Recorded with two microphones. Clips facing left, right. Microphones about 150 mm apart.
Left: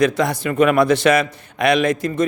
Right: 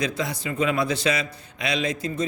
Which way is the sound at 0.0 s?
70° left (ahead or behind).